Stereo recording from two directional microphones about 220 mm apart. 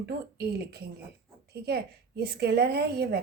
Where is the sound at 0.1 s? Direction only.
45° right (ahead or behind).